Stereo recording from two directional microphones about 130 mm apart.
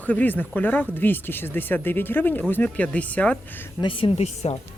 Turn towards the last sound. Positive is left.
turn(degrees=55)  # may be behind; listen again after turning